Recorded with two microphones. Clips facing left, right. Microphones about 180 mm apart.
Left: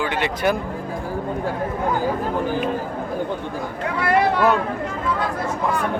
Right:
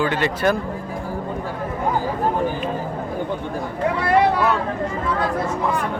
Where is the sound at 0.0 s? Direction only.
15° left (ahead or behind).